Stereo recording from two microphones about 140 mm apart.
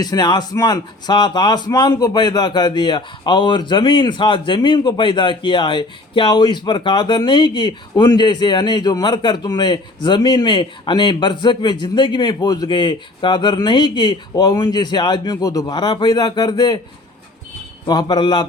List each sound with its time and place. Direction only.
0.0 s speech: 30° left (ahead or behind)
17.8 s speech: 30° left (ahead or behind)